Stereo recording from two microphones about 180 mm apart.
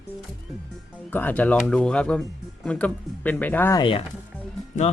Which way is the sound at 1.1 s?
10° left (ahead or behind).